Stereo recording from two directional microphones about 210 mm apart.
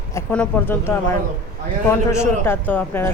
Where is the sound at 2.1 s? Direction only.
10° left (ahead or behind).